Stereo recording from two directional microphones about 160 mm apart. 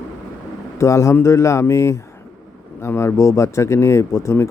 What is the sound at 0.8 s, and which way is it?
Speech, 20° left (ahead or behind).